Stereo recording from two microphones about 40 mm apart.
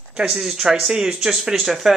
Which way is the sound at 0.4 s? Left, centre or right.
Centre.